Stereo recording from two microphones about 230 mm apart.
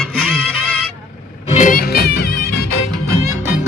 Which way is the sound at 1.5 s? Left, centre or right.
Left.